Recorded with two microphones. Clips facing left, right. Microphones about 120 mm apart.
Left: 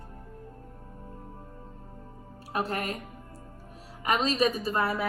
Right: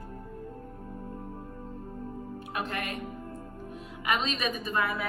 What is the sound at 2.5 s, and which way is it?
Speech, 35° left (ahead or behind).